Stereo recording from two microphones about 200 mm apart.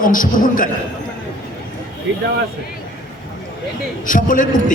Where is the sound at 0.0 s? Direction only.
40° left (ahead or behind).